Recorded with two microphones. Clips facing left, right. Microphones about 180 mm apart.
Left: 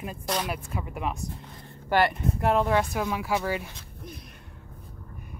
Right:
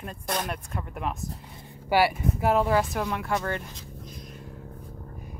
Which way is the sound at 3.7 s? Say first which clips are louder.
Even; 65° left (ahead or behind).